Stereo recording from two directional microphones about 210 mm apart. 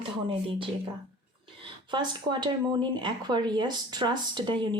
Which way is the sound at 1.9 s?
20° right (ahead or behind).